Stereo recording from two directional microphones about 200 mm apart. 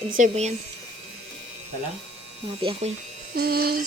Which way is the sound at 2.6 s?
25° right (ahead or behind).